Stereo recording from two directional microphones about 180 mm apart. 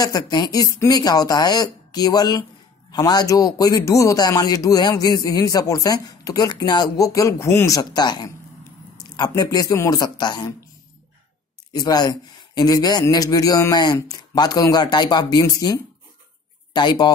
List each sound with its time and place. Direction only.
0.0 s a man's voice: 20° left (ahead or behind)
11.7 s a man's voice: 20° left (ahead or behind)